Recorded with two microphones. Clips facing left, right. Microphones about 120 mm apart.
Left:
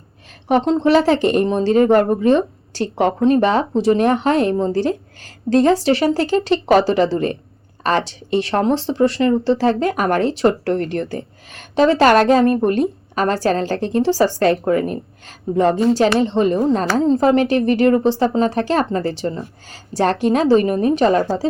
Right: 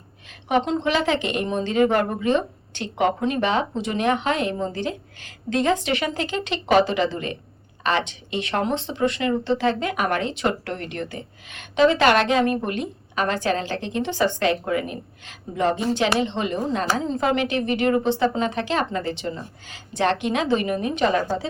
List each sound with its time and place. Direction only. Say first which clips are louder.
0.4 s speech: left 6 dB; 40° left (ahead or behind)